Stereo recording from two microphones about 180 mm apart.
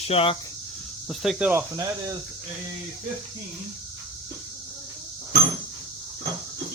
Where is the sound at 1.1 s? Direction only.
Centre (ahead or behind).